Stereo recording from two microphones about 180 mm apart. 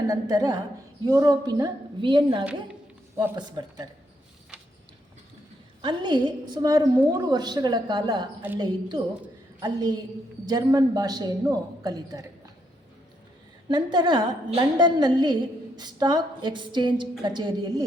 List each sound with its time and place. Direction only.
0.1 s a woman's voice: 20° right (ahead or behind)
5.8 s a woman's voice: 25° right (ahead or behind)
13.7 s a woman's voice: 25° right (ahead or behind)